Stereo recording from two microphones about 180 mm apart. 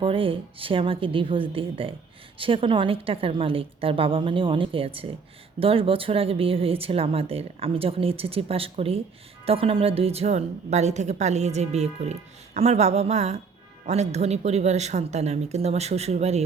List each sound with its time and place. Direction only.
0.0 s a woman's voice: 30° right (ahead or behind)